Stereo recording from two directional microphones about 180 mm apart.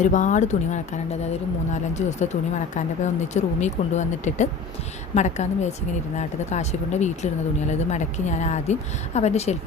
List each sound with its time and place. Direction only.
0.0 s speech: 45° left (ahead or behind)